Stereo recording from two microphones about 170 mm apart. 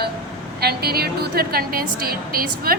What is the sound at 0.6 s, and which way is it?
A woman's voice, 65° right (ahead or behind).